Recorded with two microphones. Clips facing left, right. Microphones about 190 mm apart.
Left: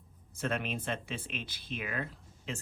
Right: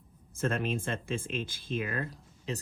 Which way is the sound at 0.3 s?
50° right (ahead or behind).